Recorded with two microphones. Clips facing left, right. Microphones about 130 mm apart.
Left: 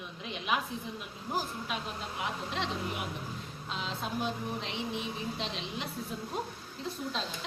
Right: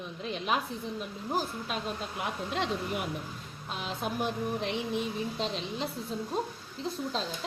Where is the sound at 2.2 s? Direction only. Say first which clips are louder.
Right 2 dB; 50° right (ahead or behind).